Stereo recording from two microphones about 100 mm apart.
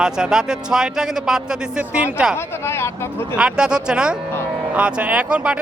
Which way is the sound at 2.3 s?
25° left (ahead or behind).